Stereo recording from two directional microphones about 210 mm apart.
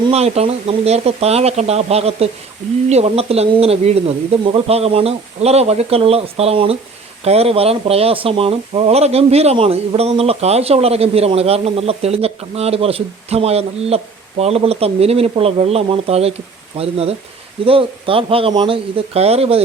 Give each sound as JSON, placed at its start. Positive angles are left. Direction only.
{"t": 0.1, "sound": "speech", "side_deg": -30}